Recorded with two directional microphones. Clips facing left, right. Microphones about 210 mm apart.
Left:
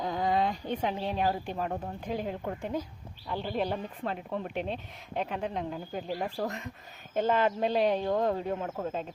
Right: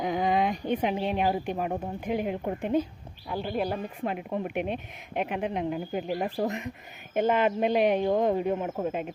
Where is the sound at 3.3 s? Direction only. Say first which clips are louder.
Right 2 dB; 10° right (ahead or behind).